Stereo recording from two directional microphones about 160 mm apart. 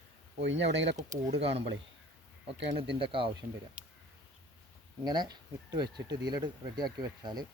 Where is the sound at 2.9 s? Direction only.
35° right (ahead or behind).